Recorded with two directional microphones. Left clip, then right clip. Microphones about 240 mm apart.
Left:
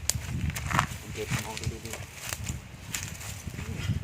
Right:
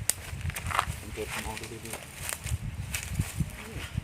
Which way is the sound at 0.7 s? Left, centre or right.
Centre.